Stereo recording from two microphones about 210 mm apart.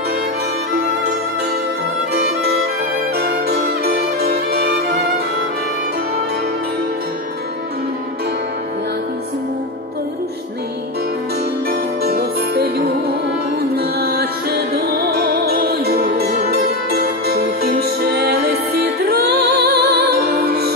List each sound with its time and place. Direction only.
3.2 s music: 50° right (ahead or behind)
12.0 s music: 50° right (ahead or behind)